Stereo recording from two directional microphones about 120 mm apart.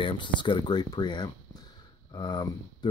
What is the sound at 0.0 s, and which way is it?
Speech, 40° left (ahead or behind).